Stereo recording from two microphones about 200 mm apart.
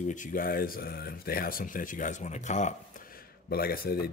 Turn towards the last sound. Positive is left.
turn(degrees=50)  # may be behind; listen again after turning